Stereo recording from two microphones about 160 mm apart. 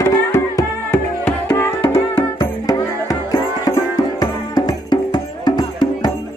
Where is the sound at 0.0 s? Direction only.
15° left (ahead or behind).